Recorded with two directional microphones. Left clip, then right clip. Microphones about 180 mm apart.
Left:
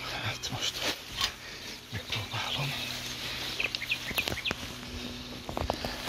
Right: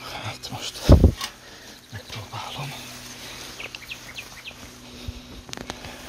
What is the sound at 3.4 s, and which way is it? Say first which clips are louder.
Bird: left 6 dB; centre (ahead or behind).